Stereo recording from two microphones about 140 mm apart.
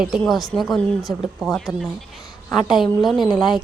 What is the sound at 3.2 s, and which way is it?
Speech, 30° left (ahead or behind).